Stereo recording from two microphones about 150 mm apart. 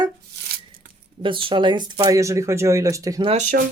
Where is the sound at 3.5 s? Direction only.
90° right.